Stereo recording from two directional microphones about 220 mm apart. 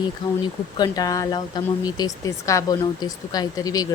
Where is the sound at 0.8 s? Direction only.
15° left (ahead or behind).